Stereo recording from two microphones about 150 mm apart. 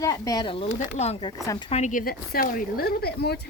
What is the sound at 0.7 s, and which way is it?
Speech, 45° left (ahead or behind).